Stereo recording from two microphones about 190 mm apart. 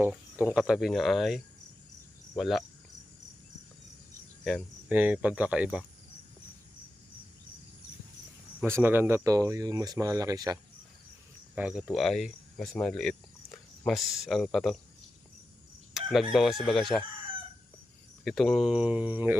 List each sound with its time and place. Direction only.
0.0 s cricket: 10° right (ahead or behind)
0.5 s speech: 5° right (ahead or behind)
2.4 s speech: centre (ahead or behind)
4.4 s speech: 5° right (ahead or behind)
8.6 s speech: 10° right (ahead or behind)
11.5 s speech: 5° right (ahead or behind)
16.0 s crowing: centre (ahead or behind)
16.7 s speech: centre (ahead or behind)
18.3 s speech: centre (ahead or behind)